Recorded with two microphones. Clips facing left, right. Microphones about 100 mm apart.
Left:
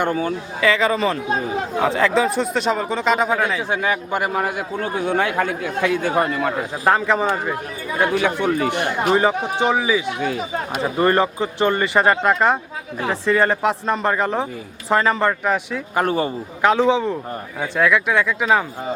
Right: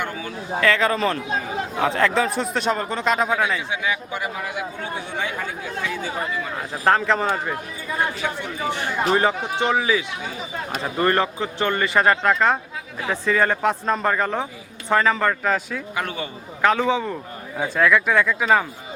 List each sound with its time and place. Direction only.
0.0 s a man's voice: 40° left (ahead or behind)
0.6 s speech: centre (ahead or behind)
3.7 s speech: 50° left (ahead or behind)
6.6 s speech: 5° left (ahead or behind)
7.9 s speech: 70° left (ahead or behind)
9.0 s speech: 15° left (ahead or behind)
10.2 s speech: 60° left (ahead or behind)
10.7 s speech: 15° left (ahead or behind)
16.0 s a man's voice: 40° left (ahead or behind)
16.6 s speech: 5° left (ahead or behind)